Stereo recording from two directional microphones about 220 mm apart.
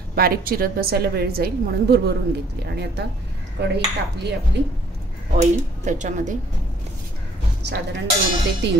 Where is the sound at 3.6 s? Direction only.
50° right (ahead or behind).